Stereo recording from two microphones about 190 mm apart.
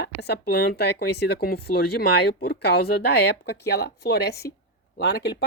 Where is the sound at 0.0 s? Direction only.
60° left (ahead or behind).